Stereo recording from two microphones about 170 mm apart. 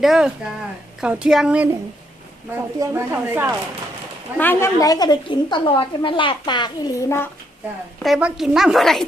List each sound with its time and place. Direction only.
0.0 s speech: 5° right (ahead or behind)
2.7 s speech: 15° right (ahead or behind)
4.4 s a woman's voice: 15° left (ahead or behind)
8.0 s speech: centre (ahead or behind)